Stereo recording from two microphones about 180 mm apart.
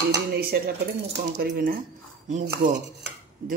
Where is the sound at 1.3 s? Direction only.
55° right (ahead or behind).